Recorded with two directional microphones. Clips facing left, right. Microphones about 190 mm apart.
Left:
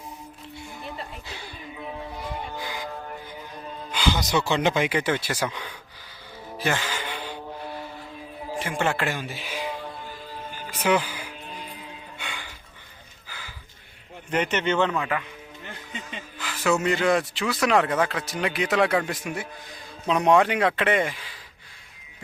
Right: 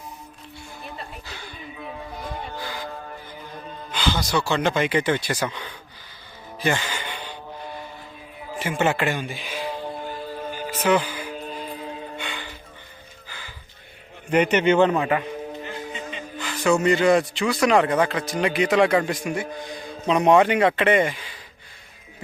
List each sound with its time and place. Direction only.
2.6 s music: 15° left (ahead or behind)
3.9 s speech: 15° left (ahead or behind)
6.6 s music: centre (ahead or behind)
8.5 s speech: 5° right (ahead or behind)
10.2 s music: 45° right (ahead or behind)
10.8 s music: 10° left (ahead or behind)
11.3 s music: 40° right (ahead or behind)
12.1 s music: 10° left (ahead or behind)
13.2 s a sound: 10° left (ahead or behind)
14.3 s a man's voice: 10° right (ahead or behind)
14.8 s a man's voice: 35° right (ahead or behind)
16.4 s speech: 5° left (ahead or behind)